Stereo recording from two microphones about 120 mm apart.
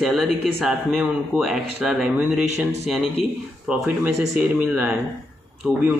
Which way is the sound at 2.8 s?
Centre (ahead or behind).